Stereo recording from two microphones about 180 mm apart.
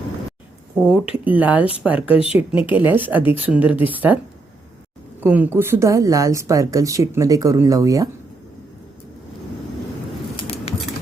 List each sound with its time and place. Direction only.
0.8 s speech: 5° right (ahead or behind)
5.2 s speech: 10° right (ahead or behind)
10.3 s a sound: 35° left (ahead or behind)